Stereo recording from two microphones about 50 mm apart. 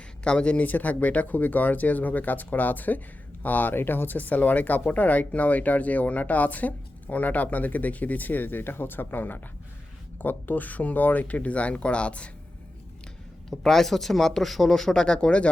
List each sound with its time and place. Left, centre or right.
0.3 s speech: left
0.6 s speech: left
13.5 s speech: centre